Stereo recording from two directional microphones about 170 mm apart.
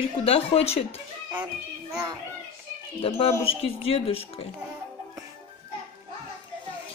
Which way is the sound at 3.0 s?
35° left (ahead or behind).